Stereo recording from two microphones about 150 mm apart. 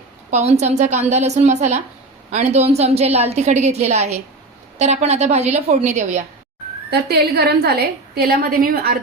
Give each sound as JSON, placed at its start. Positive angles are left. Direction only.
{"t": 0.3, "sound": "a woman's voice", "side_deg": -50}
{"t": 6.9, "sound": "a woman's voice", "side_deg": -90}